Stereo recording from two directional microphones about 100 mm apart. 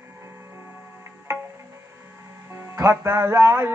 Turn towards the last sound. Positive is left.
turn(degrees=-25)  # may be behind; listen again after turning